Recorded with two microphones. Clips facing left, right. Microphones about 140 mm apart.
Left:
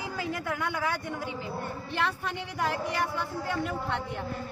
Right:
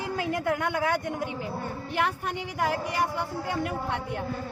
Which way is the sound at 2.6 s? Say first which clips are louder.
Right 2 dB; 10° right (ahead or behind).